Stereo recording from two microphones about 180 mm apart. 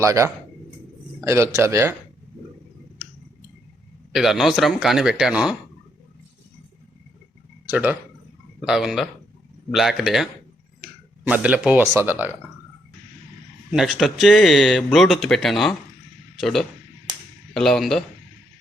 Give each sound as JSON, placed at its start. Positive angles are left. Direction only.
{"t": 0.0, "sound": "speech", "side_deg": -15}
{"t": 4.1, "sound": "speech", "side_deg": 0}
{"t": 7.7, "sound": "speech", "side_deg": -10}
{"t": 11.3, "sound": "speech", "side_deg": -5}
{"t": 13.7, "sound": "speech", "side_deg": 0}